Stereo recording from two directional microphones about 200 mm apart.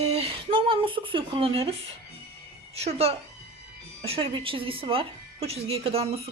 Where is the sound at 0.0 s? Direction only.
30° right (ahead or behind).